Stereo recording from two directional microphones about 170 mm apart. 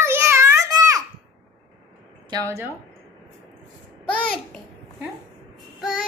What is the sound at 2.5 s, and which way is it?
Speech, 15° right (ahead or behind).